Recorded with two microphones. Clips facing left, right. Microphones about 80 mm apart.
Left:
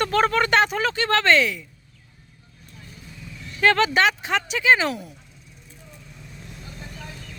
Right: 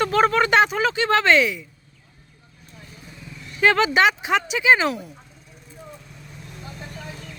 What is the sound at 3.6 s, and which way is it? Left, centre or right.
Speech, centre.